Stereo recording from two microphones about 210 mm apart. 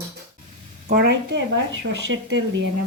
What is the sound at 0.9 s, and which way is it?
Speech, 50° right (ahead or behind).